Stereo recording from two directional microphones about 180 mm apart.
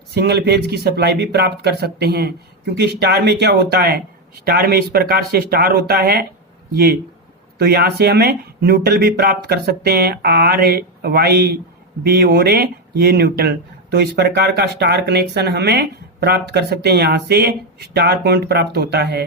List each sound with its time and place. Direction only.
0.1 s speech: 65° right (ahead or behind)
7.6 s speech: 60° right (ahead or behind)